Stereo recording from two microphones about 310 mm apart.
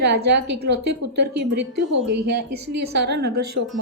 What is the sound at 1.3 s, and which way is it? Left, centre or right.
A woman's voice, right.